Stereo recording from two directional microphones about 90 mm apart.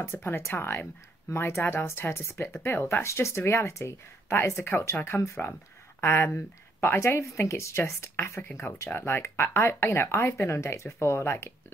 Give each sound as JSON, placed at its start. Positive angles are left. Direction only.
{"t": 0.0, "sound": "speech", "side_deg": 25}